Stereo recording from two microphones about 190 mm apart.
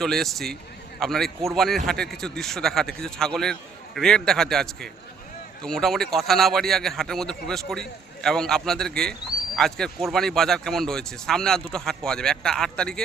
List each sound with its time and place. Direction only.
0.0 s speech: centre (ahead or behind)